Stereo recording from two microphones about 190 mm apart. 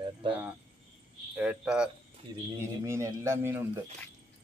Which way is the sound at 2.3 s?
20° right (ahead or behind).